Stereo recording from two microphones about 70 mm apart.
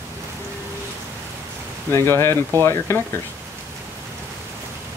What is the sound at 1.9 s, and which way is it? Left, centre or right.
Speech, left.